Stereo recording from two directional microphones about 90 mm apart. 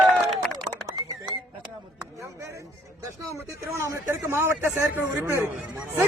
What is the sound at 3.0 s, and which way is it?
A man's voice, 35° right (ahead or behind).